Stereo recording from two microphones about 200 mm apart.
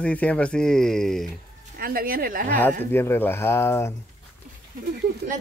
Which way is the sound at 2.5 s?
10° left (ahead or behind).